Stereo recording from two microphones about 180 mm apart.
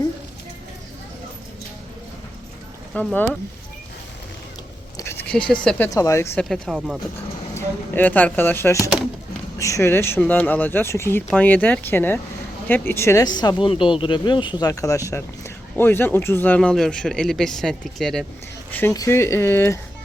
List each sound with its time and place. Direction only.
2.9 s speech: 5° left (ahead or behind)
4.9 s speech: 15° left (ahead or behind)
5.9 s speech: 20° left (ahead or behind)
6.4 s speech: centre (ahead or behind)
7.5 s speech: 10° left (ahead or behind)
18.7 s speech: 15° left (ahead or behind)